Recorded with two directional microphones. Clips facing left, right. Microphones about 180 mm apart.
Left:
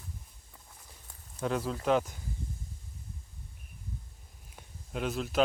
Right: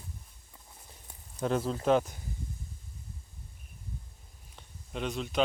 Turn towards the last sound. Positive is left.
turn(degrees=5)  # may be behind; listen again after turning